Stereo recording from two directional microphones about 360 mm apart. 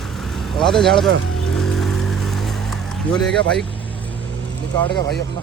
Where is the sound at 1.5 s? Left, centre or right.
Centre.